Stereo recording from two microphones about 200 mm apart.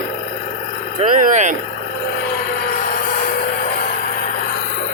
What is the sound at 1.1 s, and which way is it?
Speech, 40° right (ahead or behind).